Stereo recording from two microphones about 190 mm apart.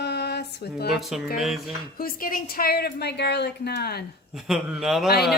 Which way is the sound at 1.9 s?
50° left (ahead or behind).